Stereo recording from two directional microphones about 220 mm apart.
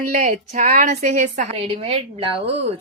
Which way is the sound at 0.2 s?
35° right (ahead or behind).